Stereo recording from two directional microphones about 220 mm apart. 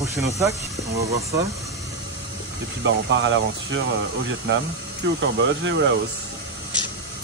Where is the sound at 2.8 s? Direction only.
55° right (ahead or behind).